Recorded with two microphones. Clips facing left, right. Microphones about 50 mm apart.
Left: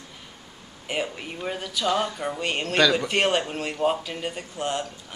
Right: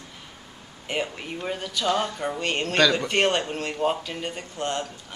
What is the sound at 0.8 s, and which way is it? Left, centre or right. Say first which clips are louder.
Speech: even; centre.